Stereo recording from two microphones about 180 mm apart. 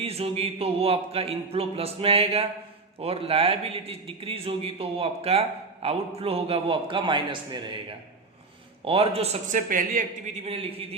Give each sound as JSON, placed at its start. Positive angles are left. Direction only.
{"t": 0.0, "sound": "a man's voice", "side_deg": -35}
{"t": 10.4, "sound": "a man's voice", "side_deg": -30}